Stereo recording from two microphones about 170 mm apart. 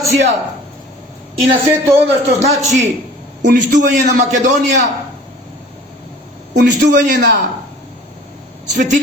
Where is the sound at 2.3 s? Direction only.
40° right (ahead or behind).